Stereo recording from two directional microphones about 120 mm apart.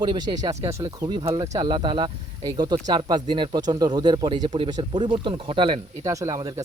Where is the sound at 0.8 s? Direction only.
40° right (ahead or behind).